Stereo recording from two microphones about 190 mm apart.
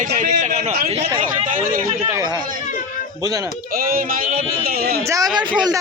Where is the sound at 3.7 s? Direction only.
50° right (ahead or behind).